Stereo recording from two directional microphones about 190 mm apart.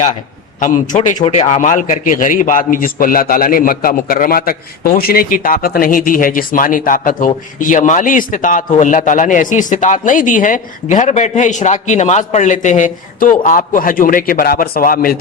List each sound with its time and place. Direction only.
0.6 s a man's voice: 40° left (ahead or behind)